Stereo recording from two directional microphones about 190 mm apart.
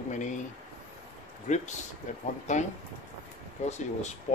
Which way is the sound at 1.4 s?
40° left (ahead or behind).